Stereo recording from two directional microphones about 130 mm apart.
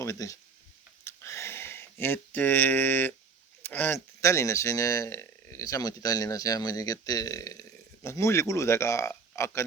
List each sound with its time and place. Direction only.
0.0 s speech: 25° left (ahead or behind)
1.0 s a sound: 20° left (ahead or behind)
3.6 s speech: 15° left (ahead or behind)